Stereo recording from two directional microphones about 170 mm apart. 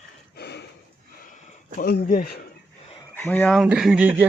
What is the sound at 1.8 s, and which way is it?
Speech, 60° left (ahead or behind).